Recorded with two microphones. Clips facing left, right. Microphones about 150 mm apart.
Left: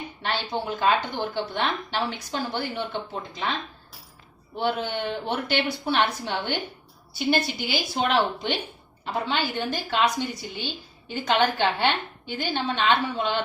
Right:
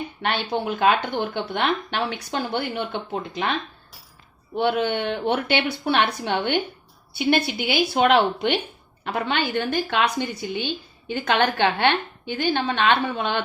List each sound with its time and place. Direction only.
0.2 s speech: 60° right (ahead or behind)
4.5 s speech: 60° right (ahead or behind)